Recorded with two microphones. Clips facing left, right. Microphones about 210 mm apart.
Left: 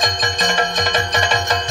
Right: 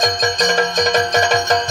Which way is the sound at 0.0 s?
45° right (ahead or behind).